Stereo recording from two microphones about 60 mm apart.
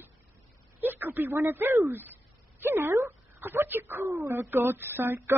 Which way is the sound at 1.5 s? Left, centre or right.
Right.